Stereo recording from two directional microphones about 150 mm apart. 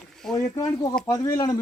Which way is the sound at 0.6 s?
25° left (ahead or behind).